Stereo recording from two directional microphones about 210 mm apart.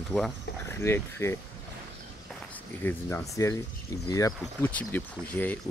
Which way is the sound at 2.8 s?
10° left (ahead or behind).